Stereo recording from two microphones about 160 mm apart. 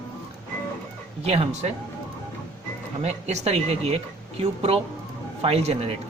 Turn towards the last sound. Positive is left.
turn(degrees=-40)  # may be behind; listen again after turning